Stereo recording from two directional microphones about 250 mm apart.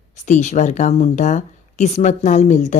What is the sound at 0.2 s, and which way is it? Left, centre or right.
Speech, left.